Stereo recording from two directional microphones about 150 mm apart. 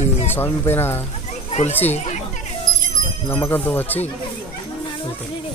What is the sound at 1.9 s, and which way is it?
Speech, 50° left (ahead or behind).